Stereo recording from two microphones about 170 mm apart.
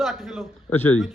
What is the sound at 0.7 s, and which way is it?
Speech, 10° left (ahead or behind).